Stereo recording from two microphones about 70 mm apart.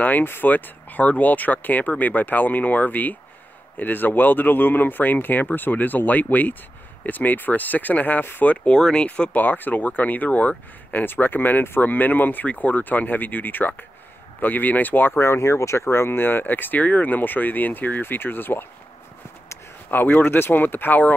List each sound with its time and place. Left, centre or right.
0.0 s speech: left
8.6 s speech: centre; by 15.2 s left
15.2 s speech: left
19.9 s speech: left